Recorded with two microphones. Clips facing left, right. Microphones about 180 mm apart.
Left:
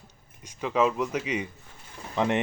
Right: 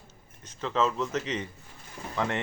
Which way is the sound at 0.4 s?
10° left (ahead or behind).